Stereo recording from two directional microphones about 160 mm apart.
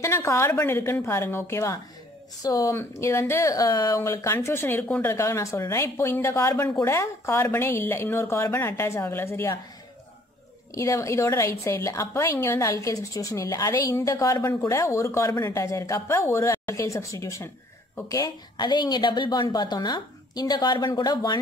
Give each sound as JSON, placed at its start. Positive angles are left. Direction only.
{"t": 0.0, "sound": "speech", "side_deg": 15}
{"t": 10.7, "sound": "a woman's voice", "side_deg": 20}